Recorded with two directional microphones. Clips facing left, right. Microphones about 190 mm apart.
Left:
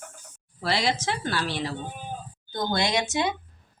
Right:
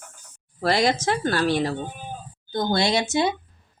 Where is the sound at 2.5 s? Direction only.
30° right (ahead or behind).